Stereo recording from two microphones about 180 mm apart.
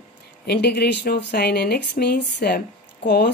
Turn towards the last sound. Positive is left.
turn(degrees=70)  # may be behind; listen again after turning